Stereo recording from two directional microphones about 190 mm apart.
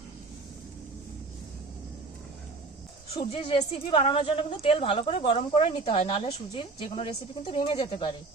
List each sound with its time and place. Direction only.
3.2 s a woman's voice: 30° left (ahead or behind)